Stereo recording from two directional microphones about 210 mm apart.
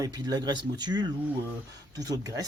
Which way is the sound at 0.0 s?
20° right (ahead or behind).